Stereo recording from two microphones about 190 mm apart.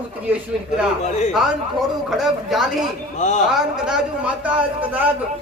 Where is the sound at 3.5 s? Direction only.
5° right (ahead or behind).